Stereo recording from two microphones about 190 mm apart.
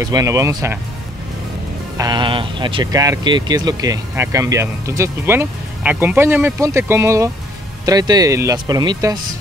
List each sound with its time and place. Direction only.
0.0 s speech: 20° right (ahead or behind)
2.0 s speech: 25° right (ahead or behind)